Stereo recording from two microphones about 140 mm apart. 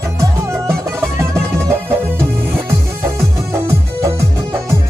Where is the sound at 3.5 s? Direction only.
20° right (ahead or behind).